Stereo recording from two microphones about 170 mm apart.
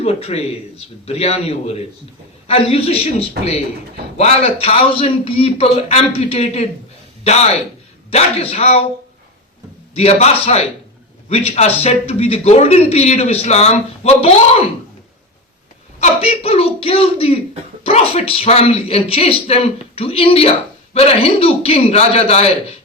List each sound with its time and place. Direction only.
0.0 s a man's voice: 35° left (ahead or behind)
9.9 s a man's voice: 35° left (ahead or behind)
16.0 s a man's voice: 35° left (ahead or behind)